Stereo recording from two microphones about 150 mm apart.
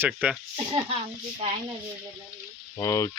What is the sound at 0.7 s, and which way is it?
Speech, 35° right (ahead or behind).